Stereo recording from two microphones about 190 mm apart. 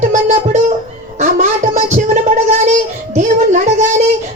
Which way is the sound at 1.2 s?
40° right (ahead or behind).